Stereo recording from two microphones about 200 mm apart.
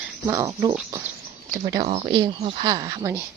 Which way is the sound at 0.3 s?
15° right (ahead or behind).